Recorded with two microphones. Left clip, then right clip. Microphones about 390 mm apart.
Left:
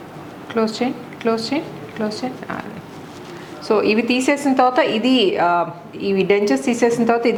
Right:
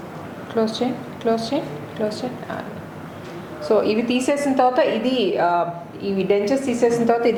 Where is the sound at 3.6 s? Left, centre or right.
Left.